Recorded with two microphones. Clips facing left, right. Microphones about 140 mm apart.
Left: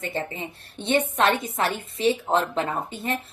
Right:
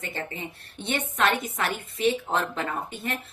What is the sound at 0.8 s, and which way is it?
A woman's voice, 25° left (ahead or behind).